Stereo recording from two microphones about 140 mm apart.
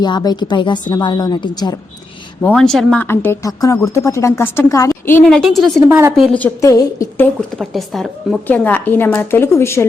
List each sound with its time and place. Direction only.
0.0 s a woman's voice: 30° left (ahead or behind)
2.4 s speech: 5° left (ahead or behind)
3.0 s speech: 15° left (ahead or behind)
5.2 s speech: centre (ahead or behind)
5.9 s a woman's voice: 15° right (ahead or behind)
6.6 s speech: 25° left (ahead or behind)
7.5 s speech: centre (ahead or behind)
8.4 s a woman's voice: 10° left (ahead or behind)